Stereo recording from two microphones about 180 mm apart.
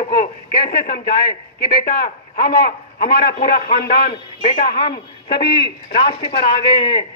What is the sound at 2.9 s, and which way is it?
Speech, 65° left (ahead or behind).